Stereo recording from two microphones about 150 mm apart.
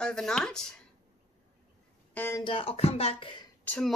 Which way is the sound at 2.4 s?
40° left (ahead or behind).